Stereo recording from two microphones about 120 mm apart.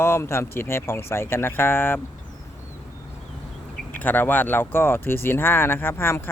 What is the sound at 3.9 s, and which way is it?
Speech, 15° left (ahead or behind).